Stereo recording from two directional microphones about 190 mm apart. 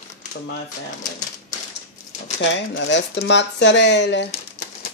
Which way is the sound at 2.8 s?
75° left (ahead or behind).